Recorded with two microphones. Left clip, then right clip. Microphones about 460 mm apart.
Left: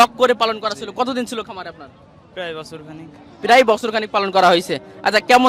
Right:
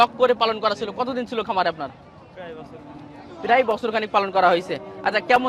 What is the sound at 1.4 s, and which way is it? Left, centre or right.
Speech, centre.